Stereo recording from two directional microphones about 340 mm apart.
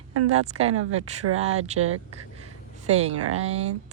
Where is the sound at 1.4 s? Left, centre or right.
Centre.